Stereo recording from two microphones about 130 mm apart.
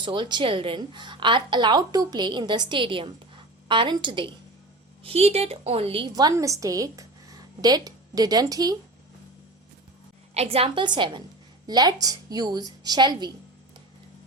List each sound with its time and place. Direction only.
0.0 s a woman's voice: 35° right (ahead or behind)
5.0 s a woman's voice: 50° right (ahead or behind)
6.1 s a woman's voice: 30° right (ahead or behind)
10.3 s a woman's voice: 50° right (ahead or behind)